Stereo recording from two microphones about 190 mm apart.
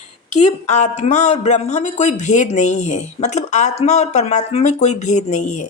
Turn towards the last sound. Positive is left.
turn(degrees=40)  # may be behind; listen again after turning